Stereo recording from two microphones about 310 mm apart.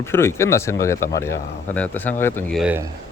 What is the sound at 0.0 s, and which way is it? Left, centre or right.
Speech, centre.